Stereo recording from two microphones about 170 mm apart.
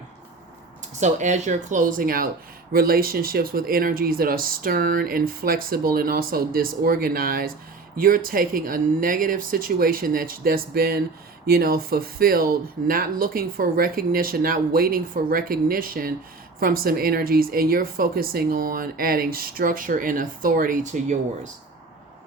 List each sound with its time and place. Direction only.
0.9 s speech: 45° right (ahead or behind)